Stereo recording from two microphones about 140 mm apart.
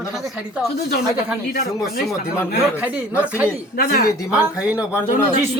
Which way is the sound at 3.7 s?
90° left.